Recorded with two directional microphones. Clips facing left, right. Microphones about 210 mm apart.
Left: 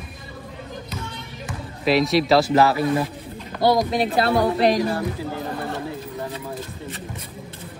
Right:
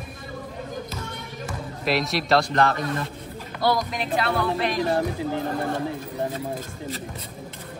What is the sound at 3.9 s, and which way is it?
Speech, 35° left (ahead or behind).